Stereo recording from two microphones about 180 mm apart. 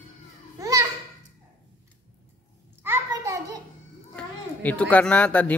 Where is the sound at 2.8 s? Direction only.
15° right (ahead or behind).